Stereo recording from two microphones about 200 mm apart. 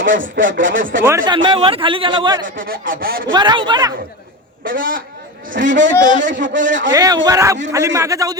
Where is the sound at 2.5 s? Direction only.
45° right (ahead or behind).